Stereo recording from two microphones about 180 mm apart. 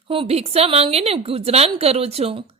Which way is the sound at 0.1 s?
30° right (ahead or behind).